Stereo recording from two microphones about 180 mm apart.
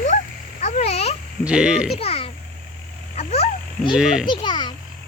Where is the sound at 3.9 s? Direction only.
5° right (ahead or behind).